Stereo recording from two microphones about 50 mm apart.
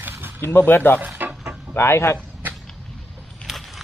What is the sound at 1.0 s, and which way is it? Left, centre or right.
Speech, right.